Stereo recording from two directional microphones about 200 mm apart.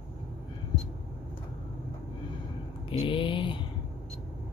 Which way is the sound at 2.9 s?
25° left (ahead or behind).